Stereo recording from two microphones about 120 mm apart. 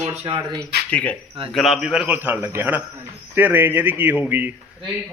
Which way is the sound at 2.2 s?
20° right (ahead or behind).